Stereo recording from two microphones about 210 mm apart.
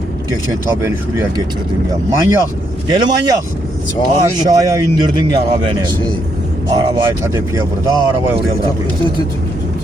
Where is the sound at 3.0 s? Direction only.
20° right (ahead or behind).